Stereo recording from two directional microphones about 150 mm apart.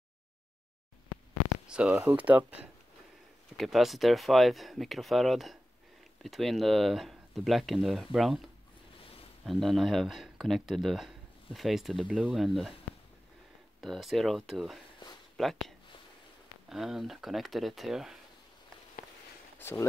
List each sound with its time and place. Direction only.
1.7 s speech: 10° right (ahead or behind)
3.5 s speech: centre (ahead or behind)
9.5 s speech: centre (ahead or behind)
13.7 s speech: centre (ahead or behind)
16.6 s speech: centre (ahead or behind)
19.6 s speech: 15° left (ahead or behind)